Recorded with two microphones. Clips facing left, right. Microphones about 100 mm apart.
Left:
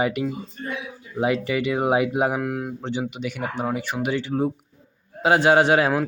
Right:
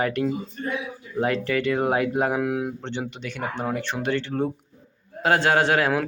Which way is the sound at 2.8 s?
10° left (ahead or behind).